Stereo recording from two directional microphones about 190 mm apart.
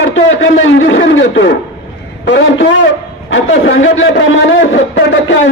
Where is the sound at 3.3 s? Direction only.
75° left (ahead or behind).